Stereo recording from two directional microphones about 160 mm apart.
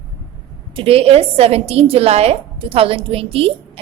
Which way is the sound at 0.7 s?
35° right (ahead or behind).